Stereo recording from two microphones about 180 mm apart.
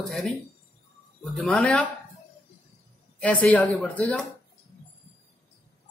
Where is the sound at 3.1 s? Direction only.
5° left (ahead or behind).